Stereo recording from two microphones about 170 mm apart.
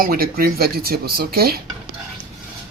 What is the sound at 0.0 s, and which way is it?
Speech, 60° right (ahead or behind).